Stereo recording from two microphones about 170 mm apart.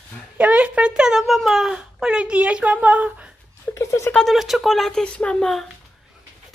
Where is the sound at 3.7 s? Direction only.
20° left (ahead or behind).